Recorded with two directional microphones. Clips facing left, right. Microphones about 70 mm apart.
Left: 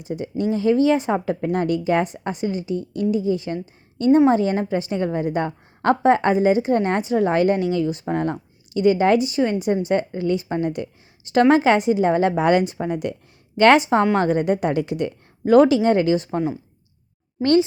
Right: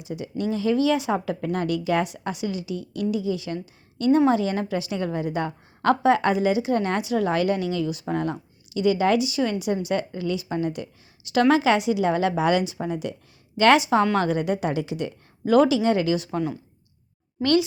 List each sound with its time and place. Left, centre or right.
0.0 s speech: left
14.0 s a woman's voice: left
14.3 s speech: left